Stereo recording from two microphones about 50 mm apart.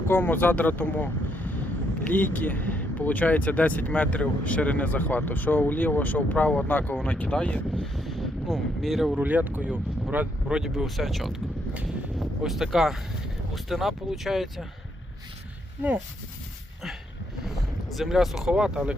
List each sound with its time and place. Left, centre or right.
0.1 s speech: left
6.7 s speech: left
7.0 s speech: left
7.8 s speech: centre
9.1 s speech: right
10.5 s speech: centre
10.8 s speech: centre
12.5 s speech: centre
17.9 s speech: centre